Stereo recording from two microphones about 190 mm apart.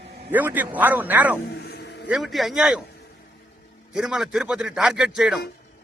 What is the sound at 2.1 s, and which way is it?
Speech, centre (ahead or behind).